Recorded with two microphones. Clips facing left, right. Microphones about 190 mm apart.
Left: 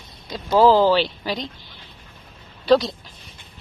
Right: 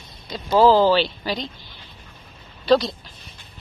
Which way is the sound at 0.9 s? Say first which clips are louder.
Even; 15° left (ahead or behind).